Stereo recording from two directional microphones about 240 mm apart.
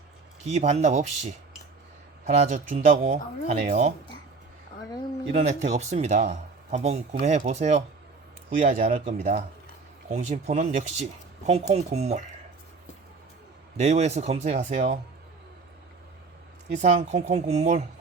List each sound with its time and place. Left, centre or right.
0.4 s speech: right
5.3 s speech: right
13.7 s speech: right
16.7 s speech: right